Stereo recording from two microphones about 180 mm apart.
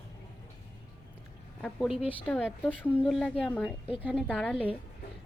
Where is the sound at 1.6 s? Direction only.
Centre (ahead or behind).